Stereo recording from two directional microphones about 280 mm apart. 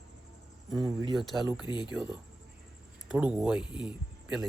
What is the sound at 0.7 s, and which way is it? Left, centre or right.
Speech, centre.